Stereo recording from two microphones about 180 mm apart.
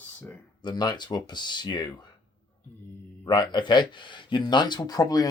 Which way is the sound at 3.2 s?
25° left (ahead or behind).